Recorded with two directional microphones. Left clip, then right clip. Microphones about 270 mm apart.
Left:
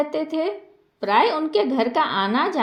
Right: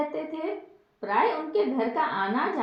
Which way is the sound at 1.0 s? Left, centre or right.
Left.